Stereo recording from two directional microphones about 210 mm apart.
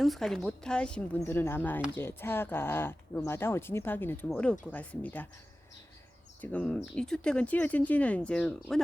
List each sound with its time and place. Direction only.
0.0 s a woman's voice: centre (ahead or behind)
6.4 s a woman's voice: 5° left (ahead or behind)